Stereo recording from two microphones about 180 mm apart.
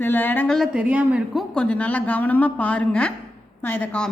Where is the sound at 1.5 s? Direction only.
5° left (ahead or behind).